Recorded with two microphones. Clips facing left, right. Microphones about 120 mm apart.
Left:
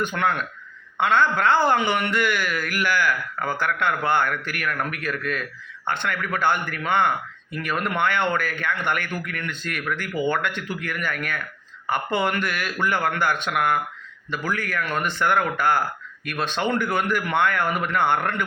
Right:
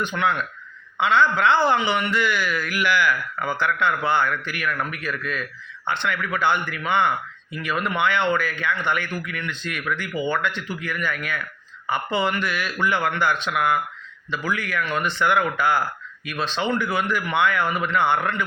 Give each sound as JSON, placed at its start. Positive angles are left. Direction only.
{"t": 0.0, "sound": "speech", "side_deg": 50}